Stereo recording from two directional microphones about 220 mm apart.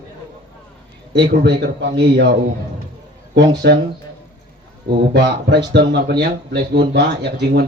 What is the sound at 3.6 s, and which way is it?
Speech, 50° right (ahead or behind).